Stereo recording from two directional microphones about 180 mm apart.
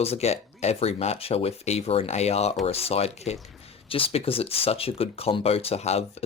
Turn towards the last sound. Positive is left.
turn(degrees=35)  # may be behind; listen again after turning